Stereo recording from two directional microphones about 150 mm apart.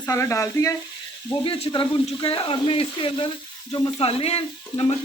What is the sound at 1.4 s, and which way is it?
Speech, 35° left (ahead or behind).